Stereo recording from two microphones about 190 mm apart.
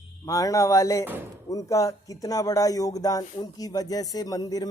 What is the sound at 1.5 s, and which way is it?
Speech, 15° left (ahead or behind).